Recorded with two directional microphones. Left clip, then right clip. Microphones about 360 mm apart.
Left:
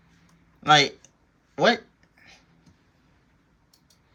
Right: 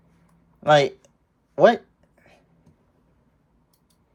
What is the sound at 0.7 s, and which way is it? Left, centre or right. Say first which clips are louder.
Speech: right 1 dB; centre.